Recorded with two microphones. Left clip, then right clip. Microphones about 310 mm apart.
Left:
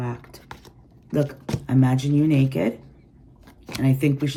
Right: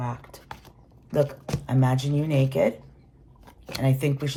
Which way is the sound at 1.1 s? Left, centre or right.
Centre.